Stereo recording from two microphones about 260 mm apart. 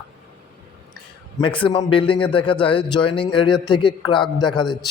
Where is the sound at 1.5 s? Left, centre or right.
Centre.